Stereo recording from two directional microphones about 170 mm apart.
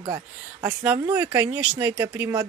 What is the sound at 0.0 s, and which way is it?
Speech, 25° right (ahead or behind).